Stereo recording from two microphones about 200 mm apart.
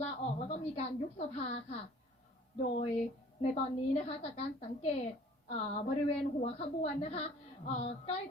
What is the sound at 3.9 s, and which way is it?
A woman's voice, 35° left (ahead or behind).